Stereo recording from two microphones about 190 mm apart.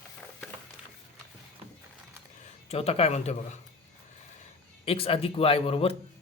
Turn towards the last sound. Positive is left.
turn(degrees=30)  # may be behind; listen again after turning